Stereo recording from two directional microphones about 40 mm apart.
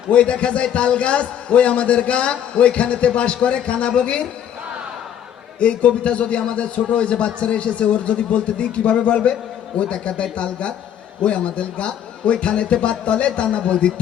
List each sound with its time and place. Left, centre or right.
0.1 s a man's voice: left
5.5 s a man's voice: left